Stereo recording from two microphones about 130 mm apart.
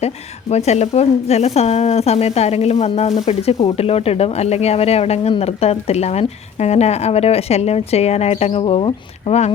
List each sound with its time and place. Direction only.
0.5 s speech: 55° left (ahead or behind)